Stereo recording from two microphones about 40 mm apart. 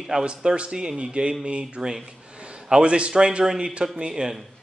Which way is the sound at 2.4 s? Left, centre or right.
Right.